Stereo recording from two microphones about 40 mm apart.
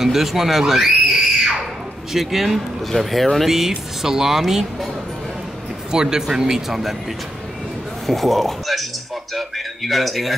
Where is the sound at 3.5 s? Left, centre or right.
Centre.